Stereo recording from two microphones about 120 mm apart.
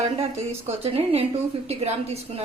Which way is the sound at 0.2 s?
55° right (ahead or behind).